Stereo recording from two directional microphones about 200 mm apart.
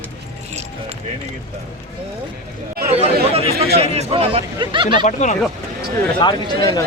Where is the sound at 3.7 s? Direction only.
30° right (ahead or behind).